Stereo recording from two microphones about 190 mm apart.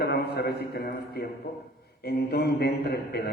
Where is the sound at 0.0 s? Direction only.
55° left (ahead or behind).